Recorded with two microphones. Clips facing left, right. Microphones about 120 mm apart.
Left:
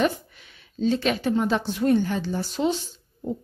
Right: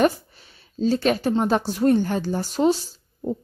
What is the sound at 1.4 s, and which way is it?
Speech, 40° right (ahead or behind).